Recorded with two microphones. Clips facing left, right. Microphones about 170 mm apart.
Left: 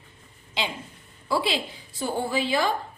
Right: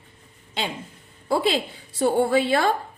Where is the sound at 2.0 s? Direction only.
65° right (ahead or behind).